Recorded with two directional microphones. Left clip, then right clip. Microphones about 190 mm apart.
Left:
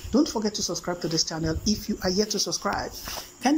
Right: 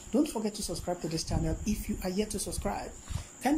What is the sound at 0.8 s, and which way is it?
Speech, 5° right (ahead or behind).